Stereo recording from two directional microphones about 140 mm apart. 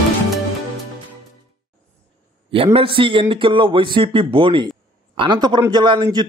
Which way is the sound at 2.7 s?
40° right (ahead or behind).